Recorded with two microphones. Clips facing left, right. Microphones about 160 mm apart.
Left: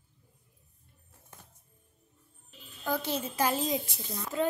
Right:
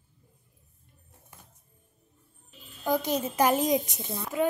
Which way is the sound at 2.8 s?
15° right (ahead or behind).